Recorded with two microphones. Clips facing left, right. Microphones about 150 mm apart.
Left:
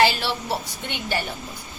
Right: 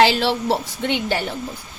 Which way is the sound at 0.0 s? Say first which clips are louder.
Right 4 dB; 90° right.